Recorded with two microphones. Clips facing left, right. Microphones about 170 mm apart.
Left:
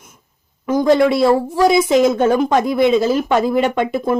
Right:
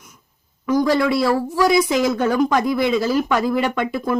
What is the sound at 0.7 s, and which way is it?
A woman's voice, 25° left (ahead or behind).